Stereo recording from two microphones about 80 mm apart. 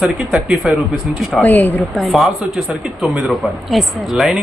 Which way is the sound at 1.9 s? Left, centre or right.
Centre.